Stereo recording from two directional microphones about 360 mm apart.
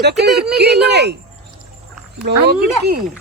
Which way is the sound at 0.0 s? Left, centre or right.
Right.